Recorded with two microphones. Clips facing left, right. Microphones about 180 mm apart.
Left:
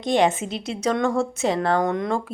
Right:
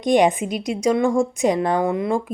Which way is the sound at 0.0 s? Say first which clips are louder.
Right 3 dB; 15° right (ahead or behind).